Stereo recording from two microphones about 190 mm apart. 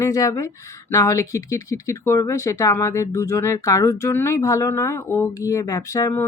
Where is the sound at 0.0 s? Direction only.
20° left (ahead or behind).